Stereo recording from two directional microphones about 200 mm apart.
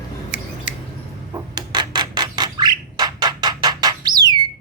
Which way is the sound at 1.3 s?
20° right (ahead or behind).